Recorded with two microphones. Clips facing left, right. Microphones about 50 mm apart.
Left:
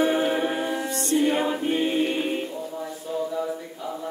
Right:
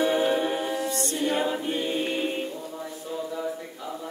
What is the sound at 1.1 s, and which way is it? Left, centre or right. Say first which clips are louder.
Choir: left 6 dB; left.